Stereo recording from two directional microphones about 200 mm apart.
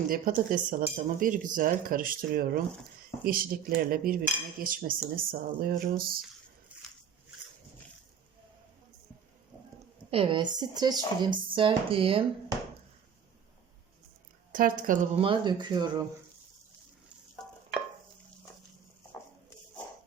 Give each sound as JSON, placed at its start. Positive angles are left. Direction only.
{"t": 0.1, "sound": "cutlery", "side_deg": -45}
{"t": 6.7, "sound": "a sound", "side_deg": -5}
{"t": 10.1, "sound": "speech", "side_deg": -25}
{"t": 14.5, "sound": "cutlery", "side_deg": -45}
{"t": 15.2, "sound": "speech", "side_deg": -25}